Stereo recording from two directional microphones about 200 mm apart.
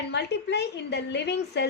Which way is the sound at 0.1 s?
60° left (ahead or behind).